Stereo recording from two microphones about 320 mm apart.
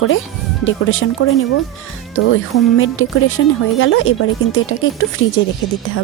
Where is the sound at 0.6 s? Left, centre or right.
Left.